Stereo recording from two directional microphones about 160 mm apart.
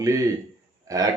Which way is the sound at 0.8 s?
20° right (ahead or behind).